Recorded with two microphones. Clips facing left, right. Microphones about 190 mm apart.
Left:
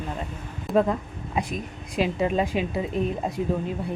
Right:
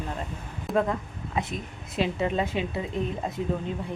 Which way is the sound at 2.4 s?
25° right (ahead or behind).